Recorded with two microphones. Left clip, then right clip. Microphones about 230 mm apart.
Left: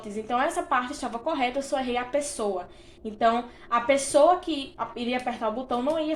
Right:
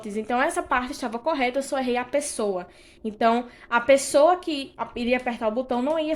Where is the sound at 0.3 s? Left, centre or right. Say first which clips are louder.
Right 2 dB; right.